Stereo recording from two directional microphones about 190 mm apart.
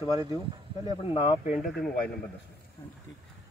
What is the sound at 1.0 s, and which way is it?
Speech, 25° left (ahead or behind).